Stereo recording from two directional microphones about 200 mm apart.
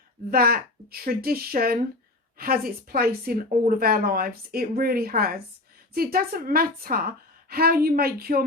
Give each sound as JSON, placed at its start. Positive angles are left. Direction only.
{"t": 0.3, "sound": "speech", "side_deg": -45}